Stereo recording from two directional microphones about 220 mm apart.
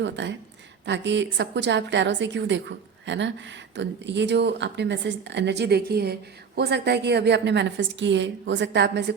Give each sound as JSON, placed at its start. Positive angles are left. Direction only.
{"t": 0.0, "sound": "a woman's voice", "side_deg": -55}